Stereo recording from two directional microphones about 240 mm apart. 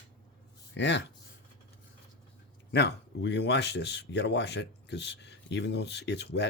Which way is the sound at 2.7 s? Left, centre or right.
Left.